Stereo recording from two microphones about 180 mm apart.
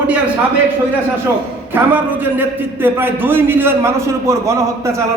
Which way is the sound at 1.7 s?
10° right (ahead or behind).